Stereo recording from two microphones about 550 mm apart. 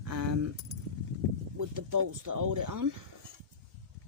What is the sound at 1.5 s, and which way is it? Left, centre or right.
Speech, right.